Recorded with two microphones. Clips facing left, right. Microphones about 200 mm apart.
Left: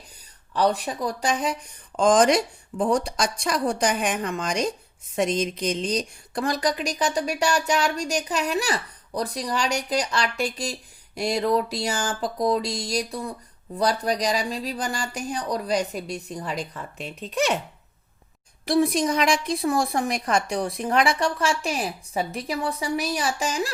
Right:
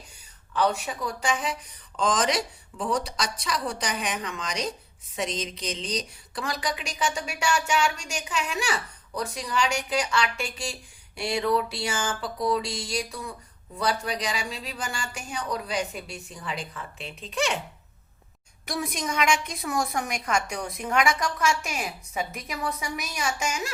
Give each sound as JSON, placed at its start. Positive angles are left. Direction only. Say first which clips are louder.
{"t": 0.5, "sound": "a woman's voice", "louder": "left 3 dB", "side_deg": 35}
{"t": 18.6, "sound": "a woman's voice", "louder": "left 10 dB", "side_deg": 30}